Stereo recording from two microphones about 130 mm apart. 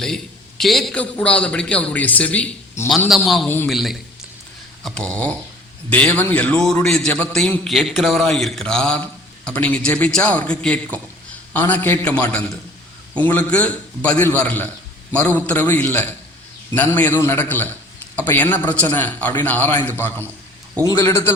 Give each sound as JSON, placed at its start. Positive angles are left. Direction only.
{"t": 0.6, "sound": "a man's voice", "side_deg": 0}
{"t": 3.2, "sound": "speech", "side_deg": 0}
{"t": 4.8, "sound": "a sound", "side_deg": 5}
{"t": 5.9, "sound": "a man's voice", "side_deg": 10}